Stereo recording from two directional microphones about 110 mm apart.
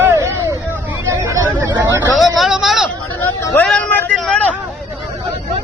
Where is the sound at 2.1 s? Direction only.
Centre (ahead or behind).